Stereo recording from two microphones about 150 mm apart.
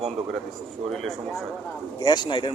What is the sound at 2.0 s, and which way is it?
Speech, 30° left (ahead or behind).